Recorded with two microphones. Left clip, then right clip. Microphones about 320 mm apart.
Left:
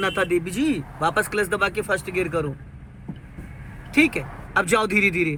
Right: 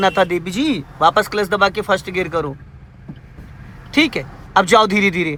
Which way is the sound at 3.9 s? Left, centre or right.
Right.